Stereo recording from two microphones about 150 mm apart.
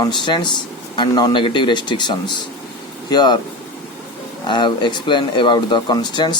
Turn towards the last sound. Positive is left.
turn(degrees=30)  # may be behind; listen again after turning